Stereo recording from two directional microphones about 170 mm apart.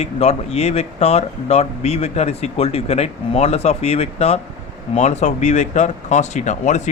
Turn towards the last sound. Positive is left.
turn(degrees=45)  # may be behind; listen again after turning